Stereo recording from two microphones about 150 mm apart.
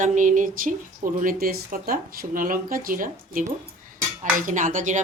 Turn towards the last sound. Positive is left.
turn(degrees=-60)  # may be behind; listen again after turning